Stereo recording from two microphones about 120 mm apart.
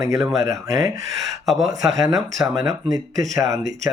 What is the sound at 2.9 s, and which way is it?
Speech, 30° right (ahead or behind).